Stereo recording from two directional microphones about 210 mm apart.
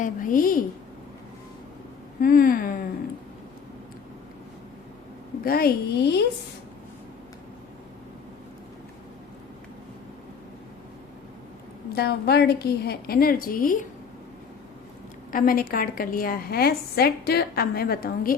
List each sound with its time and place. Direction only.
0.0 s a woman's voice: 40° left (ahead or behind)
2.2 s a woman's voice: 40° left (ahead or behind)
5.4 s a woman's voice: 45° left (ahead or behind)
11.9 s a woman's voice: 50° left (ahead or behind)
15.3 s a woman's voice: 40° left (ahead or behind)